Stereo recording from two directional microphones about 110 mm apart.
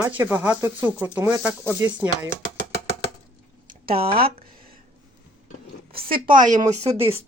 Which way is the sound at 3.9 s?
55° right (ahead or behind).